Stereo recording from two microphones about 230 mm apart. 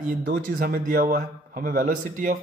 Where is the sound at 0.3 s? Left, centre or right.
Right.